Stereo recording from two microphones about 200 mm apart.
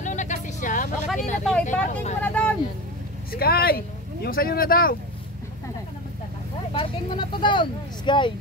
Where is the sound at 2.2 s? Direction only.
5° left (ahead or behind).